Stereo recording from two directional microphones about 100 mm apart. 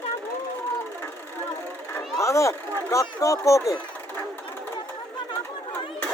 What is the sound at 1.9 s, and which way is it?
Speech, 30° left (ahead or behind).